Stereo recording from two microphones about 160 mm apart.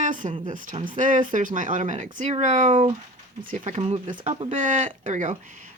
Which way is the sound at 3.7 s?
40° right (ahead or behind).